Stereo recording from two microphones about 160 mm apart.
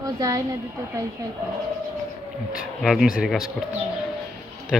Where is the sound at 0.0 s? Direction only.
20° right (ahead or behind).